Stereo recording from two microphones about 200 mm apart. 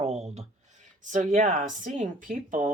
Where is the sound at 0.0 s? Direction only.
35° right (ahead or behind).